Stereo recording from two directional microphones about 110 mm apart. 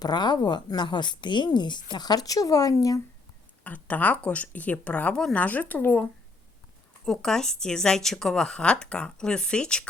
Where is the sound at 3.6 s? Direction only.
15° left (ahead or behind).